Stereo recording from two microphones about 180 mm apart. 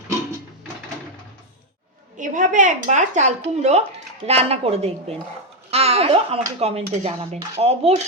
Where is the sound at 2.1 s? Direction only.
45° right (ahead or behind).